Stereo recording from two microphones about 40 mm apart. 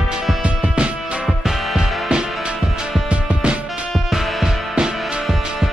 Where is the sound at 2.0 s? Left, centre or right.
Centre.